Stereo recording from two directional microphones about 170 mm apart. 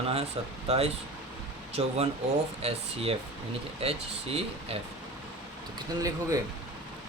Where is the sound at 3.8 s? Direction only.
35° right (ahead or behind).